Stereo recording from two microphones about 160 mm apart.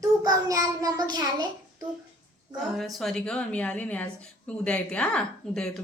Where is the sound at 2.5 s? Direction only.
Centre (ahead or behind).